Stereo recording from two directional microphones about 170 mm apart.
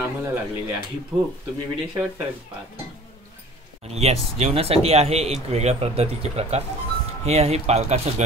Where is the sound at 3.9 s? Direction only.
35° right (ahead or behind).